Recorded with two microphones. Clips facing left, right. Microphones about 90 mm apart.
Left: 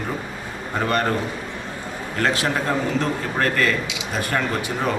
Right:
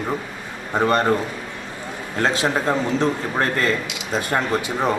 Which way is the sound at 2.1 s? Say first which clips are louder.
Right 2 dB; 25° right (ahead or behind).